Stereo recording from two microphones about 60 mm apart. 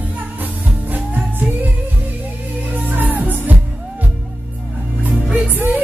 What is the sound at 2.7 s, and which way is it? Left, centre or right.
Music, right.